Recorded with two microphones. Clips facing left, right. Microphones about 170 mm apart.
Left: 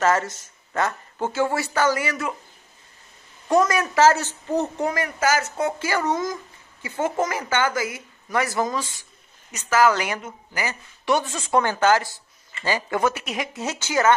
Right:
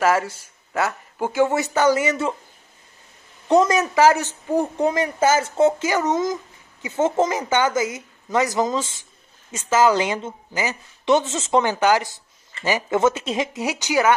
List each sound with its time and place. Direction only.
0.0 s speech: 10° right (ahead or behind); by 2.3 s 25° right (ahead or behind)
3.4 s speech: 20° right (ahead or behind)